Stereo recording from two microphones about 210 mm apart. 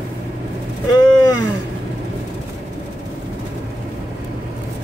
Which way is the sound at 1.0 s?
20° left (ahead or behind).